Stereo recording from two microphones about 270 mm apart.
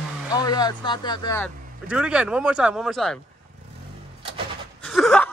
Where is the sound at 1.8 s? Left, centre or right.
Centre.